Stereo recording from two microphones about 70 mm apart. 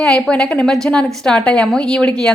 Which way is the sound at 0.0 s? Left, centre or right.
Centre.